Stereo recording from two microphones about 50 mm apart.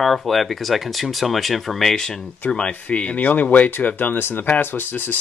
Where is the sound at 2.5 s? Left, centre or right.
Left.